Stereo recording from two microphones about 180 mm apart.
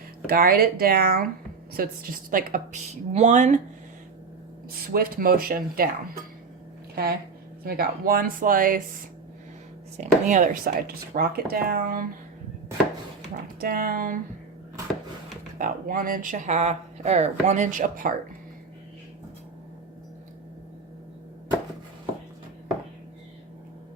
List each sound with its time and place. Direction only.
0.3 s speech: 55° right (ahead or behind)
4.7 s speech: 55° right (ahead or behind)
7.6 s speech: 55° right (ahead or behind)
10.0 s speech: 45° right (ahead or behind)
13.6 s speech: 55° right (ahead or behind)
15.5 s speech: 50° right (ahead or behind)